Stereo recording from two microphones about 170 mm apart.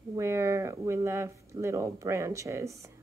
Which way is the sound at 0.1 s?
15° right (ahead or behind).